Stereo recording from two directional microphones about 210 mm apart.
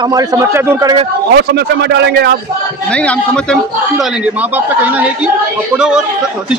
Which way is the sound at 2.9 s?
5° left (ahead or behind).